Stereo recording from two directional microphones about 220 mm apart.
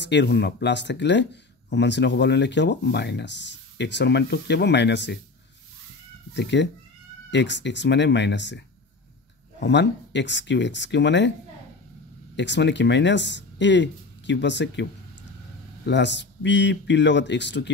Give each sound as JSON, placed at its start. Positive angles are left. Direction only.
{"t": 0.0, "sound": "speech", "side_deg": 50}
{"t": 6.3, "sound": "speech", "side_deg": 55}
{"t": 12.4, "sound": "speech", "side_deg": 55}